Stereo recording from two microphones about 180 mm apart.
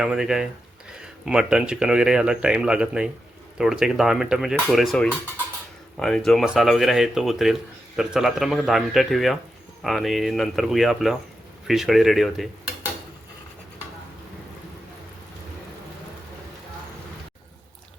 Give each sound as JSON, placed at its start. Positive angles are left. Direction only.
{"t": 0.0, "sound": "speech", "side_deg": -5}